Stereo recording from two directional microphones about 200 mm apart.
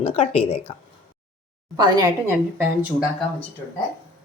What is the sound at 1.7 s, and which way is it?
Speech, 20° right (ahead or behind).